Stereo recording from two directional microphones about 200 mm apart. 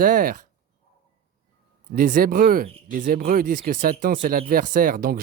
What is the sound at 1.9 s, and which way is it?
Speech, 45° right (ahead or behind).